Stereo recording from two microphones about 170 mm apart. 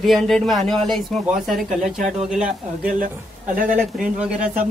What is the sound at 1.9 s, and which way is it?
Speech, 45° right (ahead or behind).